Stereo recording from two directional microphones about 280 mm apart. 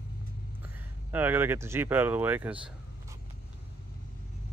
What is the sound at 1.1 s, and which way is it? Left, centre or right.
Speech, centre.